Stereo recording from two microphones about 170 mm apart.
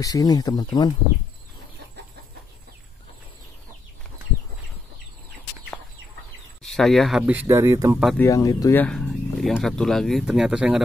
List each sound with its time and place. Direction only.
0.0 s speech: 20° left (ahead or behind)
6.6 s speech: centre (ahead or behind); by 8.0 s 15° right (ahead or behind)
8.2 s speech: 20° left (ahead or behind)
8.8 s speech: 5° left (ahead or behind)